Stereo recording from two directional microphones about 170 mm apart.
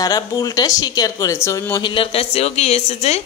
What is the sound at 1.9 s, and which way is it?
A woman's voice, 35° left (ahead or behind).